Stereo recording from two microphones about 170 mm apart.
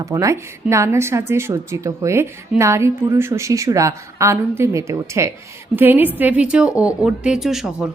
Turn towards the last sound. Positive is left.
turn(degrees=0)  # may be behind; listen again after turning